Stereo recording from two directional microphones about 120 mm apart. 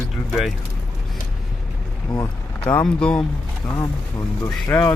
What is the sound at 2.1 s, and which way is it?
Speech, 5° left (ahead or behind).